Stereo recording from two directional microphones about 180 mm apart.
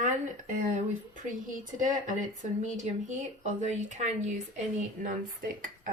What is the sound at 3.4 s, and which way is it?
A woman's voice, 40° right (ahead or behind).